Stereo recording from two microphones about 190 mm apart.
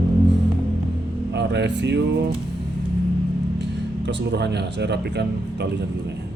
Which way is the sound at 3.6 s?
65° right (ahead or behind).